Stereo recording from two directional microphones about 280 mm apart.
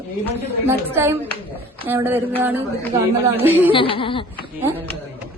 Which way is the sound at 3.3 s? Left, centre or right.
Centre.